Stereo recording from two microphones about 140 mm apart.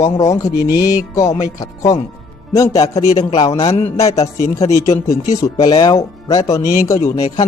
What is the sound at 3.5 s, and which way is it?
Speech, 45° left (ahead or behind).